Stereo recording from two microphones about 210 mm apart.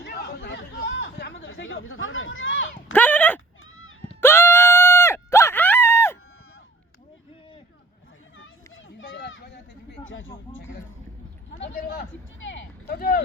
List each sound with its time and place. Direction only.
0.0 s chatter: 50° left (ahead or behind); by 2.6 s 70° left (ahead or behind)
2.9 s speech: 5° left (ahead or behind)
4.2 s screaming: 10° left (ahead or behind)
8.4 s children playing: 70° left (ahead or behind)
10.0 s a sound: 70° left (ahead or behind)
11.6 s a sound: 45° left (ahead or behind)